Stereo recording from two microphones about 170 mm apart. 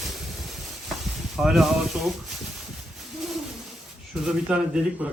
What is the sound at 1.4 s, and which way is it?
Speech, centre (ahead or behind).